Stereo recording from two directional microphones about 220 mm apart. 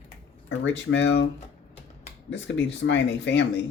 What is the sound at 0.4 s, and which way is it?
Speech, 55° left (ahead or behind).